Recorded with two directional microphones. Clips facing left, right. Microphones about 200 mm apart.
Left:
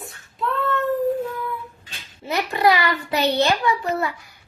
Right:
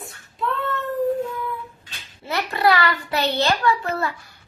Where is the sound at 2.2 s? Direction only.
15° left (ahead or behind).